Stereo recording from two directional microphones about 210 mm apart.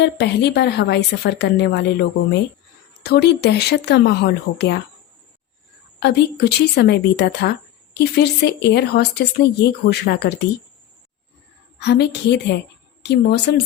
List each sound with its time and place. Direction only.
0.0 s a woman's voice: 55° left (ahead or behind)
6.0 s a woman's voice: 50° left (ahead or behind)
11.8 s a woman's voice: 55° left (ahead or behind)